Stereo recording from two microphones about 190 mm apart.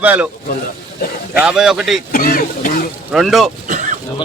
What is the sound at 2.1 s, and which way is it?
Speech, 50° left (ahead or behind).